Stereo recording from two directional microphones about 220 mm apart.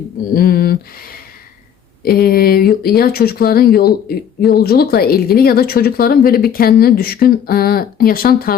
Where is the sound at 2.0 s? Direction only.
45° left (ahead or behind).